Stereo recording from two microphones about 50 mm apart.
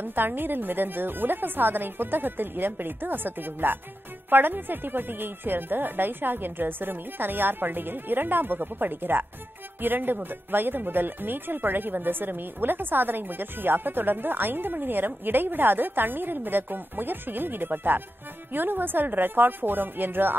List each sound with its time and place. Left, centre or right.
0.0 s a woman's voice: right